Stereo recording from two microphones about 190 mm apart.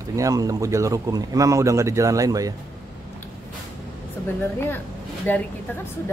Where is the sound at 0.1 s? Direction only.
15° right (ahead or behind).